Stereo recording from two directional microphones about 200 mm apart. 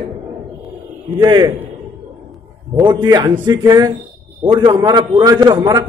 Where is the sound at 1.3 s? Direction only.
20° right (ahead or behind).